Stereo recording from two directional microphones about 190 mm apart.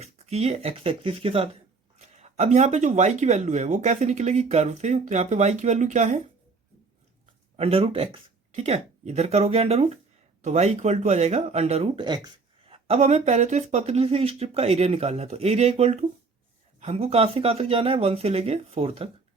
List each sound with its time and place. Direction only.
0.0 s speech: 35° right (ahead or behind)
7.5 s speech: 30° right (ahead or behind)